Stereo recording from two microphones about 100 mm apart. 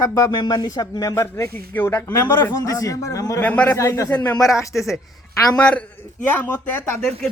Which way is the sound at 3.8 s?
30° left (ahead or behind).